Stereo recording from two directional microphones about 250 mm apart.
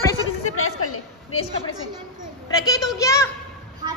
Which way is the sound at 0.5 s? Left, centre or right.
Left.